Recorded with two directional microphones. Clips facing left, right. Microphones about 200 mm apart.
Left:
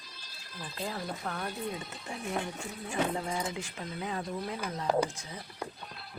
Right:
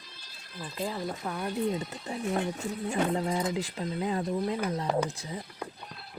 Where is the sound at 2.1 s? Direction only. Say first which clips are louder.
Right 5 dB; 35° right (ahead or behind).